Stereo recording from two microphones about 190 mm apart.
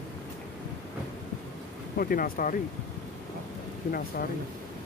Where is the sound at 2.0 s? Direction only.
50° left (ahead or behind).